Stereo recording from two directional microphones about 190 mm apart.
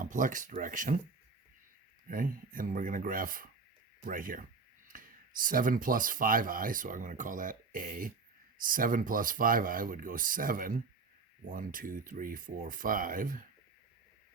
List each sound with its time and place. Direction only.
0.0 s speech: 45° right (ahead or behind)
2.0 s speech: 45° right (ahead or behind)